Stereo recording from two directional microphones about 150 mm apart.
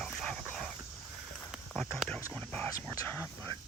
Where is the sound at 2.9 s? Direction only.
20° left (ahead or behind).